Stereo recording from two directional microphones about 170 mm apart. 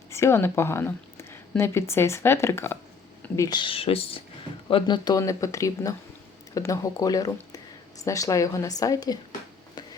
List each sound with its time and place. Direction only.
0.1 s speech: 15° left (ahead or behind)